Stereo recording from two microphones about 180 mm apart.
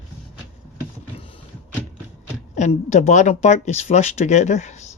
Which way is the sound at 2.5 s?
40° left (ahead or behind).